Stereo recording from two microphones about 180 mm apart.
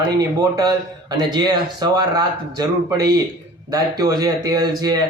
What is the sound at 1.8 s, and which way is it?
Speech, 20° right (ahead or behind).